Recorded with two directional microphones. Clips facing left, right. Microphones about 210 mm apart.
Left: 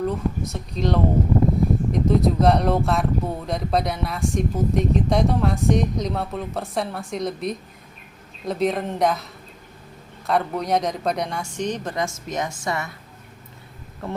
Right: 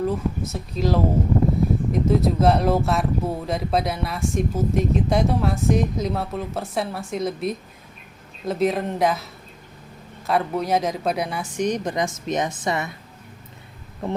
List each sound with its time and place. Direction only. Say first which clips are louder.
0.0 s a woman's voice: even; centre (ahead or behind); by 12.9 s 20° right (ahead or behind)
14.0 s a woman's voice: right 3 dB; 20° right (ahead or behind)